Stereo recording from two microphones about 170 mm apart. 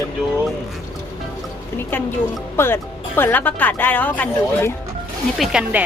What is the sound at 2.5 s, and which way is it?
Speech, 15° left (ahead or behind).